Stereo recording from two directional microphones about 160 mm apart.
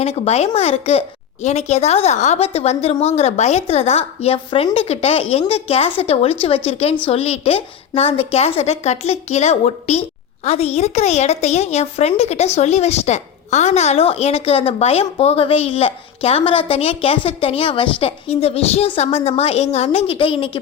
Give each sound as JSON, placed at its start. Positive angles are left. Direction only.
{"t": 0.0, "sound": "a woman's voice", "side_deg": 40}